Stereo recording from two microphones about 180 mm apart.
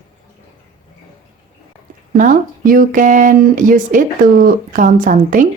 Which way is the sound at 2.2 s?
50° right (ahead or behind).